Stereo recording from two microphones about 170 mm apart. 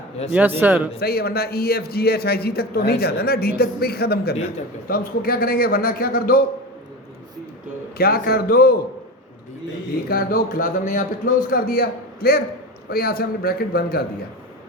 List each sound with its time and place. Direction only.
0.3 s a man's voice: 10° right (ahead or behind)
0.9 s a man's voice: 65° left (ahead or behind)
7.9 s a man's voice: 65° left (ahead or behind)
10.1 s a man's voice: 60° left (ahead or behind)